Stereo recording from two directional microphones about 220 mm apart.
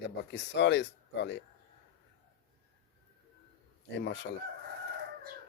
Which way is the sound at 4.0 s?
50° left (ahead or behind).